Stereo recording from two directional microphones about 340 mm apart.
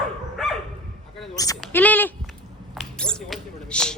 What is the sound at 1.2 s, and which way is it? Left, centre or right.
Bleat, centre.